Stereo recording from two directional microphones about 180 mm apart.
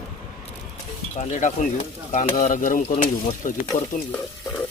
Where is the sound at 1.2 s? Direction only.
40° left (ahead or behind).